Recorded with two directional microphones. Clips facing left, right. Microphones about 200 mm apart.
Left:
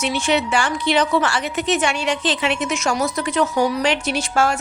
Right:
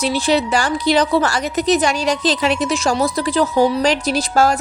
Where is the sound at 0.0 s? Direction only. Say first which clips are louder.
Right 3 dB; 35° right (ahead or behind).